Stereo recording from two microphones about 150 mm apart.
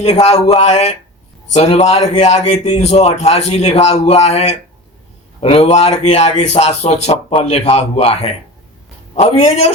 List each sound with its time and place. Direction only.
0.0 s a man's voice: 45° left (ahead or behind)